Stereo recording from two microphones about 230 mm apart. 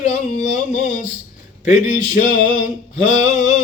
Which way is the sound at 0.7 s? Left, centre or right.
Left.